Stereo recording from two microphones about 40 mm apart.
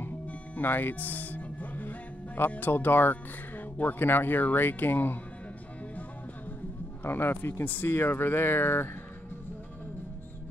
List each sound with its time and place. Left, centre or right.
0.6 s music: left
2.5 s speech: left
4.0 s speech: left
7.0 s speech: left